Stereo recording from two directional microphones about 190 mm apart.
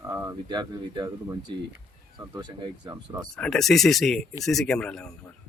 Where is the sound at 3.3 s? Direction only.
5° left (ahead or behind).